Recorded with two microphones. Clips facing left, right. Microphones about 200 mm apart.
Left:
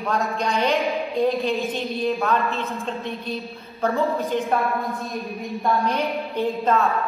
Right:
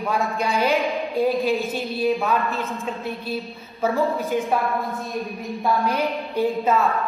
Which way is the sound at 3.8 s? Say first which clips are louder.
Even; centre (ahead or behind).